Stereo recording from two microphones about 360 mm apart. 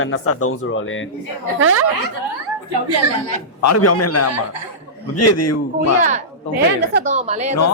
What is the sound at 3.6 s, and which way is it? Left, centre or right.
Speech, left.